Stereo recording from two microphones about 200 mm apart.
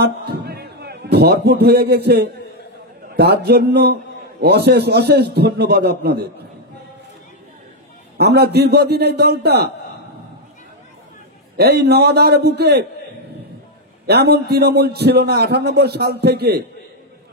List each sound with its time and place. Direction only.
0.0 s a sound: 55° right (ahead or behind)
3.2 s a man's voice: 55° right (ahead or behind)
8.2 s a man's voice: 55° right (ahead or behind)
11.5 s a man's voice: 55° right (ahead or behind)
14.0 s a man's voice: 55° right (ahead or behind)